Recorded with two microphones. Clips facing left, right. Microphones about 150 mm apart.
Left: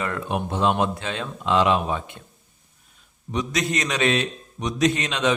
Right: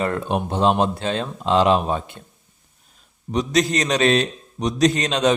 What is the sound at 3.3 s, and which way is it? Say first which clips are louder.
A man's voice: right 5 dB; 35° right (ahead or behind).